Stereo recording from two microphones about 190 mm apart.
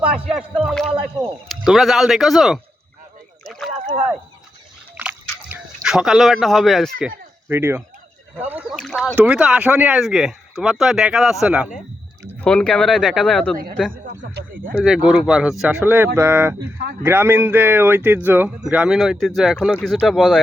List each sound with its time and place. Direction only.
0.5 s speech: centre (ahead or behind)
3.4 s rowboat: centre (ahead or behind)
4.9 s a sound: 5° right (ahead or behind)
7.4 s speech: 10° right (ahead or behind)
8.8 s speech: centre (ahead or behind)
14.3 s speech: 45° right (ahead or behind)
14.8 s speech: 5° right (ahead or behind)
16.6 s speech: 60° right (ahead or behind)
17.0 s speech: 10° right (ahead or behind)